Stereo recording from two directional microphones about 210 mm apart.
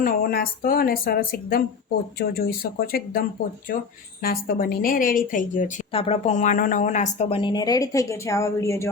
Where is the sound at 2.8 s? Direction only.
45° left (ahead or behind).